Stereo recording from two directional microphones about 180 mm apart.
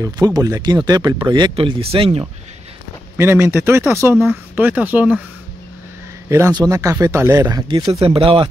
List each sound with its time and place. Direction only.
0.0 s speech: 20° right (ahead or behind)
3.2 s speech: 15° right (ahead or behind)
6.2 s a man's voice: 15° right (ahead or behind); by 8.5 s 30° right (ahead or behind)